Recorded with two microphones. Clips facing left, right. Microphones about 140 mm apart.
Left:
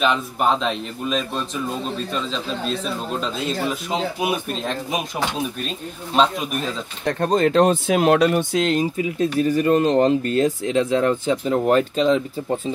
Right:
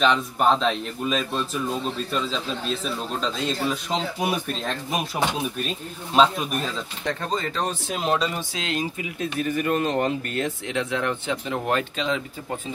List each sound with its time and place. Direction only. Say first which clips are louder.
0.0 s speech: even; 5° left (ahead or behind)
3.2 s speech: even; 5° left (ahead or behind)
6.1 s speech: even; centre (ahead or behind)
7.1 s speech: left 9 dB; 60° left (ahead or behind); by 12.2 s 40° left (ahead or behind)